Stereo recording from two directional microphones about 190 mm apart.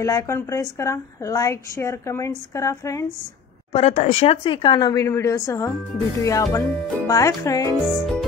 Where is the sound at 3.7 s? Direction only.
35° left (ahead or behind); by 7.8 s 15° left (ahead or behind).